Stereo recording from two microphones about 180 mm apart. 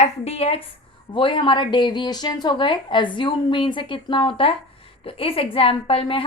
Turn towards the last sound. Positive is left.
turn(degrees=30)  # may be behind; listen again after turning